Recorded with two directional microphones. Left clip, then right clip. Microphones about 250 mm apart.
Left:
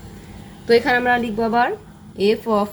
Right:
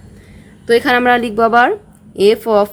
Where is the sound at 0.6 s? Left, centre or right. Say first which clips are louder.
Right 4 dB; right.